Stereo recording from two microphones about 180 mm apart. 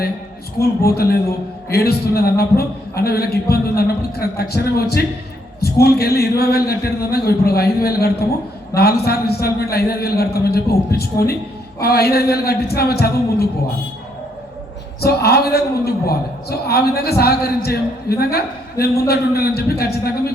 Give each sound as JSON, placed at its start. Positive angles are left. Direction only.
{"t": 0.6, "sound": "a man's voice", "side_deg": 60}
{"t": 15.0, "sound": "a man's voice", "side_deg": 60}